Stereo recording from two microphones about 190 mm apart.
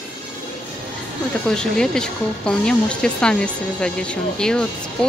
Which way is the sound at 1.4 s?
5° left (ahead or behind).